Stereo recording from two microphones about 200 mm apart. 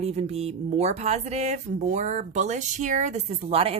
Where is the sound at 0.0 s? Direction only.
30° right (ahead or behind).